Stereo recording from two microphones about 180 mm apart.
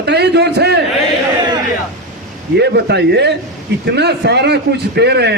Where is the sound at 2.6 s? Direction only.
70° right (ahead or behind).